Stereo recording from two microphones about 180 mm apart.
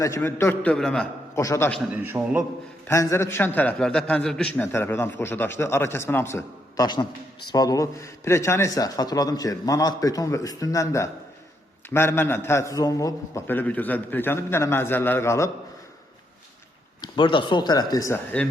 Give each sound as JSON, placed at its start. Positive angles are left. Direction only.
{"t": 0.0, "sound": "a man's voice", "side_deg": 15}
{"t": 1.4, "sound": "a man's voice", "side_deg": 15}
{"t": 2.0, "sound": "a man's voice", "side_deg": -10}
{"t": 2.8, "sound": "a man's voice", "side_deg": 15}
{"t": 17.0, "sound": "a man's voice", "side_deg": 25}